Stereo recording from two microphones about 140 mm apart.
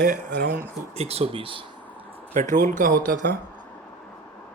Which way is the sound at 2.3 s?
70° right (ahead or behind).